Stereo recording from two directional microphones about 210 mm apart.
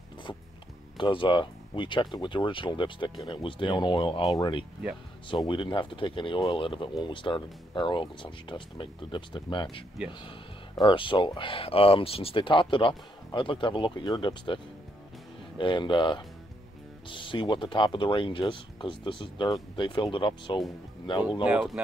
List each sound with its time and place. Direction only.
0.9 s speech: 25° left (ahead or behind)
21.5 s speech: 5° right (ahead or behind)